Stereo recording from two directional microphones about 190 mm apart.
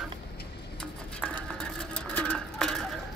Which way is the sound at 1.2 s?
5° left (ahead or behind).